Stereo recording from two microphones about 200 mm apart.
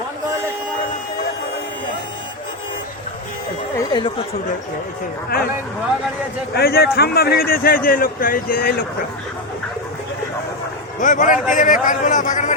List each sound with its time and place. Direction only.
3.8 s speech: 20° left (ahead or behind)
6.5 s a man's voice: 50° left (ahead or behind)
11.0 s a man's voice: 40° left (ahead or behind)